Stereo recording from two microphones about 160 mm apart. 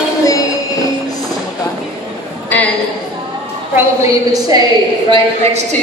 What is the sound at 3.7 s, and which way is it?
Speech, 20° right (ahead or behind).